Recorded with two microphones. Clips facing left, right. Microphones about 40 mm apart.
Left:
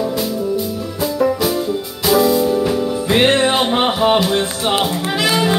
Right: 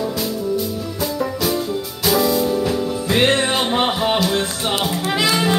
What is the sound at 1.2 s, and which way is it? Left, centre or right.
Music, centre.